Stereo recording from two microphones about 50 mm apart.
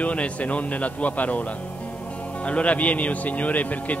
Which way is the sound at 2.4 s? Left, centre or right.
Left.